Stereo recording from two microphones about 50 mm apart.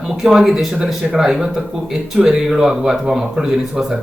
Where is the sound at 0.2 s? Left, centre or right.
Centre.